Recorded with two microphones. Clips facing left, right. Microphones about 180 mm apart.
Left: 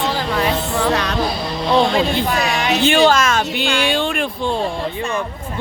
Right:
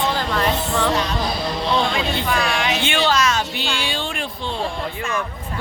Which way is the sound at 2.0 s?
40° left (ahead or behind).